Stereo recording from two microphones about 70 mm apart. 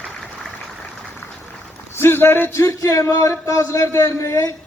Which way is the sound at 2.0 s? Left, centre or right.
Left.